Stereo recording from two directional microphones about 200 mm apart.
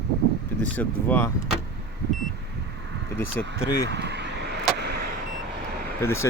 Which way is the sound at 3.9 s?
60° right (ahead or behind).